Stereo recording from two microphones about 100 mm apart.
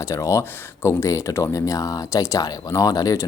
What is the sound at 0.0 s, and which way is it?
Speech, 30° left (ahead or behind).